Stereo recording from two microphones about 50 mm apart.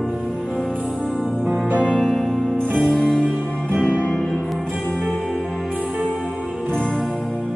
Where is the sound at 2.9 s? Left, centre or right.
Centre.